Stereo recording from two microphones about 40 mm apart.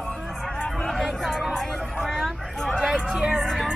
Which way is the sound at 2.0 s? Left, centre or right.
Centre.